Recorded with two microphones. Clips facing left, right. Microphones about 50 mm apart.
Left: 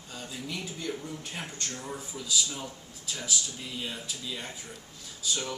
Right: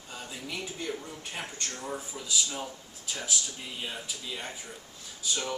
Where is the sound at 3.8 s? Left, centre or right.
Centre.